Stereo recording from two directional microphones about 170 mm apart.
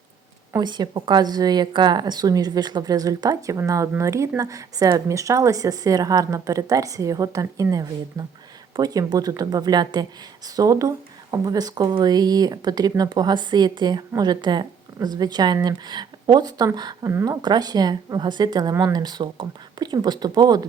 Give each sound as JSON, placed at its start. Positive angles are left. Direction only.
{"t": 0.5, "sound": "speech", "side_deg": -25}